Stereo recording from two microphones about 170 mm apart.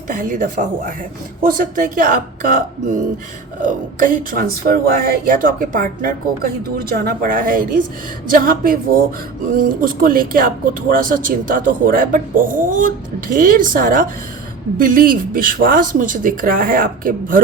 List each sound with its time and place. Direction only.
0.1 s speech: 50° right (ahead or behind)